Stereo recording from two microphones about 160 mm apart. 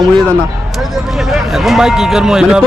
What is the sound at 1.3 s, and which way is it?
A man's voice, centre (ahead or behind).